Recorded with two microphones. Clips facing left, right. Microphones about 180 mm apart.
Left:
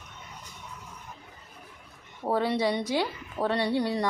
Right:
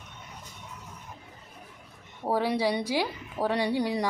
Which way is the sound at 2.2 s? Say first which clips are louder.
Even; 10° right (ahead or behind).